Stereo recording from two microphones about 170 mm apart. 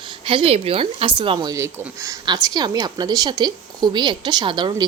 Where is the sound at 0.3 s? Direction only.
35° right (ahead or behind).